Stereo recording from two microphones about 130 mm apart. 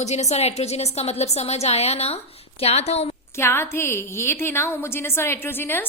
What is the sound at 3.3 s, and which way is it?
A woman's voice, 20° left (ahead or behind).